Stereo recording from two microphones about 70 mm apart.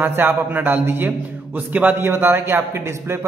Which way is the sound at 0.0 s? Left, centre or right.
Right.